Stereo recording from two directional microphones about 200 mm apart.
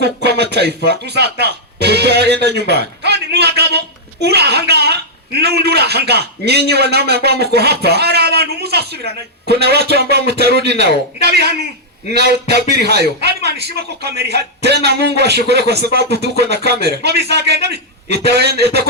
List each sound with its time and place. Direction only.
0.0 s a man's voice: 55° right (ahead or behind)